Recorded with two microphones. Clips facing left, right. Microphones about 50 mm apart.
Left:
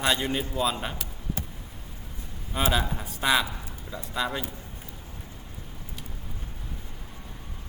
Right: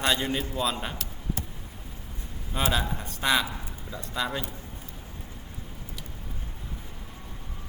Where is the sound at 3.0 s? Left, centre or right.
Centre.